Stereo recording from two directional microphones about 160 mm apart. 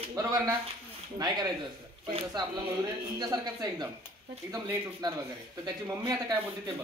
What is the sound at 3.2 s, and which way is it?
Speech, 25° right (ahead or behind).